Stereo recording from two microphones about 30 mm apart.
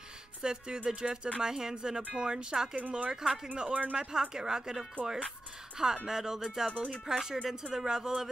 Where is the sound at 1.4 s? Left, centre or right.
Centre.